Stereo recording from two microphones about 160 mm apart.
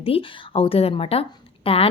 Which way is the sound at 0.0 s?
35° left (ahead or behind).